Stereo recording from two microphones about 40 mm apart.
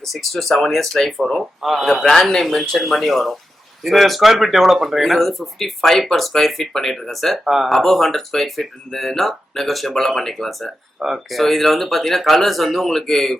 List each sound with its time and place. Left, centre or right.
0.0 s speech: centre